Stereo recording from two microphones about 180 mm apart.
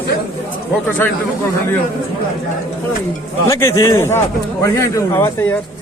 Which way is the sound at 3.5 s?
15° left (ahead or behind).